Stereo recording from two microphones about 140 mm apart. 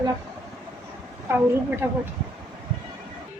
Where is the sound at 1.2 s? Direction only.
15° right (ahead or behind).